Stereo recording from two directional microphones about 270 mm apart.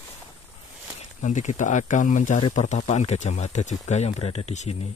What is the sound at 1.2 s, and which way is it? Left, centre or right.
Speech, left.